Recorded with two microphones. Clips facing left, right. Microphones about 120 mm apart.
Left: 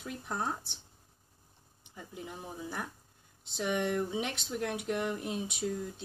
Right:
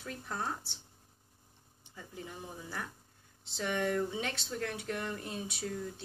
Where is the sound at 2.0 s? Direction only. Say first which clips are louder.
Left 1 dB; 15° left (ahead or behind).